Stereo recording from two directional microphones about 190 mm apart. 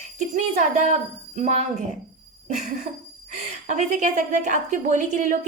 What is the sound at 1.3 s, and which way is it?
Speech, 35° right (ahead or behind).